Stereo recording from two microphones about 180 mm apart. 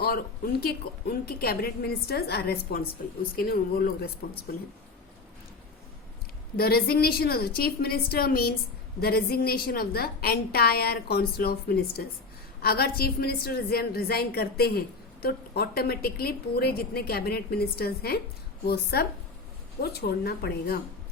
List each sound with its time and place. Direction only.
0.0 s a woman's voice: 60° left (ahead or behind)
6.6 s a woman's voice: 55° left (ahead or behind)